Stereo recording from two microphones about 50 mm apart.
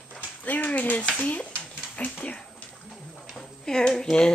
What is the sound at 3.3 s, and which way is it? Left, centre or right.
Speech, centre.